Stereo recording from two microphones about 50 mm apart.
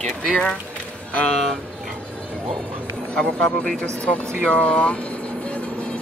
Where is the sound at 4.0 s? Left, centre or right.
Left.